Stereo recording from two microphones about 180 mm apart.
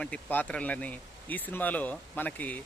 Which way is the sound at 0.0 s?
10° left (ahead or behind).